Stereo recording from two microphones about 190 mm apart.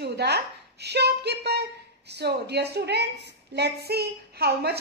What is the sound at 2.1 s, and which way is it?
A woman's voice, 60° right (ahead or behind).